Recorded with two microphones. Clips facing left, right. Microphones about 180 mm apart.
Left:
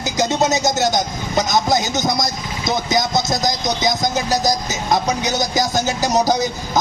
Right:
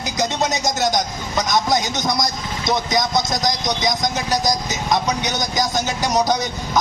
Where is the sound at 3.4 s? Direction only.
30° left (ahead or behind).